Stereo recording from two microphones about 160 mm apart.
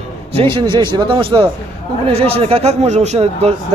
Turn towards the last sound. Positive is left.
turn(degrees=-40)  # may be behind; listen again after turning